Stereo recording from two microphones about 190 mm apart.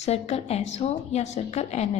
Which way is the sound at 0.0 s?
35° left (ahead or behind).